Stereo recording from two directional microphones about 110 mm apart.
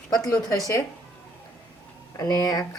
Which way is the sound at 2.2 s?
35° left (ahead or behind).